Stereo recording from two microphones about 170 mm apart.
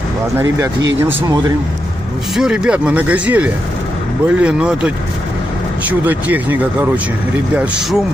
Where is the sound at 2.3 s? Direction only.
5° right (ahead or behind).